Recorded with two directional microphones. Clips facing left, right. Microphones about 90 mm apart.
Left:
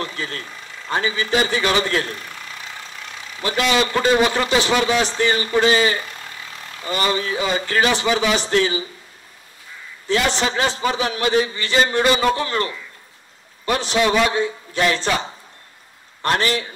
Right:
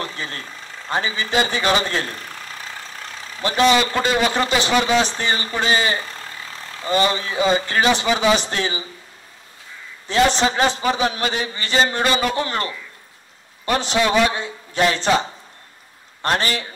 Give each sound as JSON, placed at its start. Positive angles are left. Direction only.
{"t": 0.0, "sound": "a man's voice", "side_deg": -30}
{"t": 4.0, "sound": "a man's voice", "side_deg": 25}
{"t": 4.8, "sound": "a man's voice", "side_deg": -20}
{"t": 5.6, "sound": "vehicle", "side_deg": -25}
{"t": 7.2, "sound": "a man's voice", "side_deg": -30}
{"t": 10.0, "sound": "a man's voice", "side_deg": -20}
{"t": 13.7, "sound": "a man's voice", "side_deg": -20}
{"t": 16.2, "sound": "a man's voice", "side_deg": -35}